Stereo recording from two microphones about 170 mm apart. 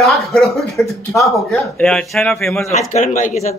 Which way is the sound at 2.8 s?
50° left (ahead or behind).